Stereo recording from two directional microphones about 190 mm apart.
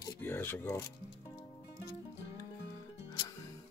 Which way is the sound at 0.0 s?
10° left (ahead or behind).